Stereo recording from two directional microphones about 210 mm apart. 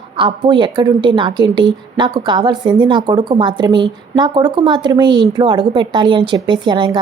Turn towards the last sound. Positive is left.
turn(degrees=-20)  # may be behind; listen again after turning